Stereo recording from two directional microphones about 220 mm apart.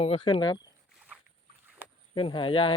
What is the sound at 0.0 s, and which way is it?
Speech, 25° left (ahead or behind).